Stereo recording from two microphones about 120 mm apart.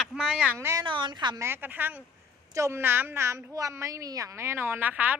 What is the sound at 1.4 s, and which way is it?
A woman's voice, 20° right (ahead or behind).